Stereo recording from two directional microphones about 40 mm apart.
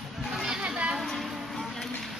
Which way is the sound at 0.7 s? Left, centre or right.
Right.